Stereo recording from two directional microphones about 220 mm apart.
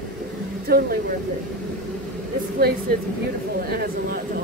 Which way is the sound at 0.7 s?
45° right (ahead or behind).